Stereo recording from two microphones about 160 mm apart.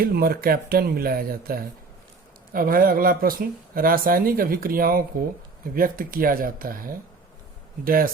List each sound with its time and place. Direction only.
0.0 s speech: 70° right (ahead or behind)